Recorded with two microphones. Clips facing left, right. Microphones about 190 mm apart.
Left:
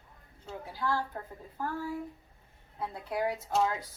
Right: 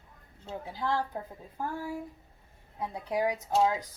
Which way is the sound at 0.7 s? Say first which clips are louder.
Right 1 dB; 20° right (ahead or behind).